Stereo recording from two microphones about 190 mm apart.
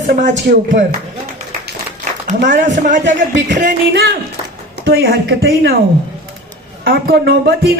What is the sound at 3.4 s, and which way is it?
Speech, 40° right (ahead or behind).